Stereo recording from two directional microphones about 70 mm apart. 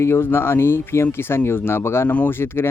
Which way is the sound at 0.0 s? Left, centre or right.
Left.